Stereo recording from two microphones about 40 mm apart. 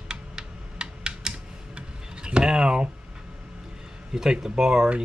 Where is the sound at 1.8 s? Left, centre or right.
Right.